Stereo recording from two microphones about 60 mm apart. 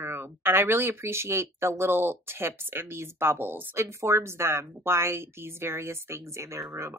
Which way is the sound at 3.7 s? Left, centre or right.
Right.